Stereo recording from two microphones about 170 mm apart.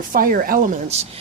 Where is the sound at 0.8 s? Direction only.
40° right (ahead or behind).